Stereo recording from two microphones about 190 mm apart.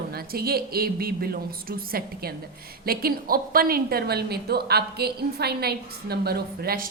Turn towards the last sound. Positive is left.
turn(degrees=-50)  # may be behind; listen again after turning